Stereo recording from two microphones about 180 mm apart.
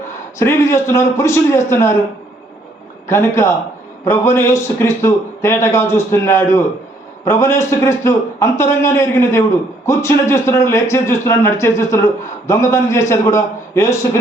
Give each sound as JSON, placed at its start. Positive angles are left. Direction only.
{"t": 0.3, "sound": "speech", "side_deg": 15}
{"t": 3.1, "sound": "speech", "side_deg": 15}